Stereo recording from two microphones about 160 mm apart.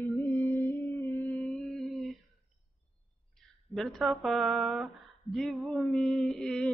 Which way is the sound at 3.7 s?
Centre (ahead or behind).